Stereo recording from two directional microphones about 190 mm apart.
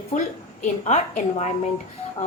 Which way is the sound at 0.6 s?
40° left (ahead or behind).